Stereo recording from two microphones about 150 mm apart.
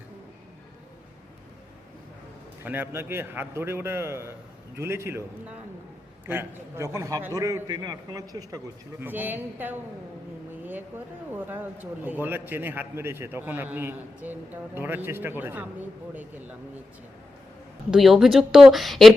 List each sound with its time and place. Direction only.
2.6 s a man's voice: 15° right (ahead or behind)
9.0 s a man's voice: 15° right (ahead or behind)
17.9 s speech: centre (ahead or behind)